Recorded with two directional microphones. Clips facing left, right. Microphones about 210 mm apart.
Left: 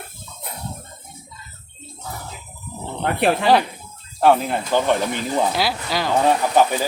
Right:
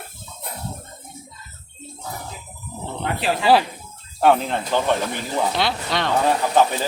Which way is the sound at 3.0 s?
55° left (ahead or behind).